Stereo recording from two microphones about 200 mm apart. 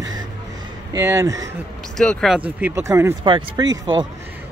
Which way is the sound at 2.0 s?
5° left (ahead or behind).